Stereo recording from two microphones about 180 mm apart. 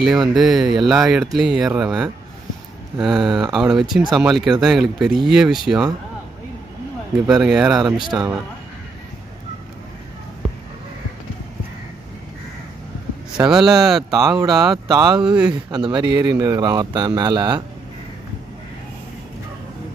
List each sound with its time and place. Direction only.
0.0 s speech: centre (ahead or behind)
7.2 s speech: centre (ahead or behind)
8.0 s speech: 25° right (ahead or behind)
13.4 s speech: centre (ahead or behind)
14.1 s speech: 20° right (ahead or behind)
15.2 s speech: 5° right (ahead or behind)
15.7 s speech: 25° right (ahead or behind)